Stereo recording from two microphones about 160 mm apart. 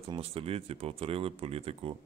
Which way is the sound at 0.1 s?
35° right (ahead or behind).